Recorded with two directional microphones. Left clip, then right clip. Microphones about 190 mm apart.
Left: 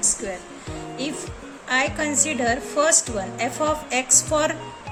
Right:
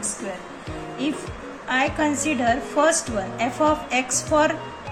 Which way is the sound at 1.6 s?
60° left (ahead or behind).